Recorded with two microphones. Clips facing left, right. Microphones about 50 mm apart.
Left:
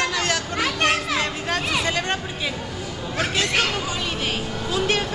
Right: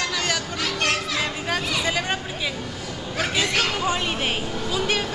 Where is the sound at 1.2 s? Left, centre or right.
Centre.